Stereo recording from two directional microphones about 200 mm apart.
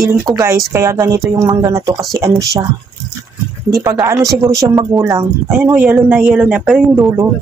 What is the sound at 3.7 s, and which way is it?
A woman's voice, 15° right (ahead or behind).